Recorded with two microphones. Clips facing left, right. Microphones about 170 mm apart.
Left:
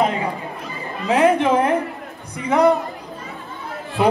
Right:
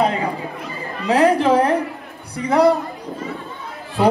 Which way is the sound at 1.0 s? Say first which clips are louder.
Right 1 dB; 35° right (ahead or behind).